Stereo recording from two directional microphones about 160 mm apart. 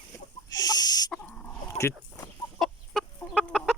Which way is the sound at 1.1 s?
10° left (ahead or behind).